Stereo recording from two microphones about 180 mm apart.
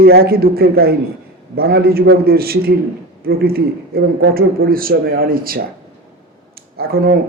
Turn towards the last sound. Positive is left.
turn(degrees=-55)  # may be behind; listen again after turning